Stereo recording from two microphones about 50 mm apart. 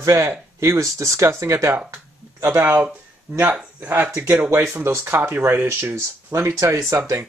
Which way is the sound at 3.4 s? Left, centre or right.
Right.